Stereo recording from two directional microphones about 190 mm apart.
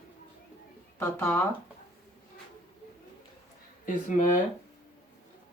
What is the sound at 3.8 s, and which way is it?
Speech, 40° left (ahead or behind).